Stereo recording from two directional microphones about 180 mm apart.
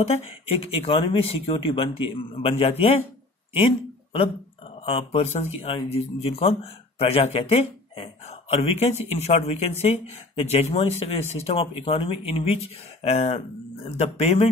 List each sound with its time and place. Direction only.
0.0 s speech: 30° left (ahead or behind)